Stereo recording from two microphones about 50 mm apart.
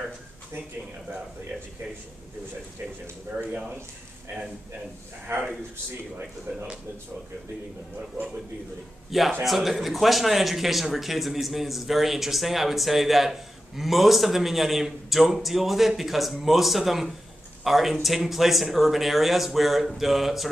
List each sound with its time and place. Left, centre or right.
3.3 s speech: right
5.3 s speech: right
9.4 s speech: centre